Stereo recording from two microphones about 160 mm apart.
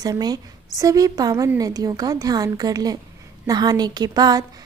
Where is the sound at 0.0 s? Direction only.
25° right (ahead or behind).